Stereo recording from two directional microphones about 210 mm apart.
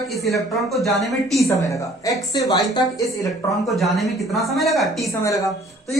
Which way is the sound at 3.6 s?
Centre (ahead or behind).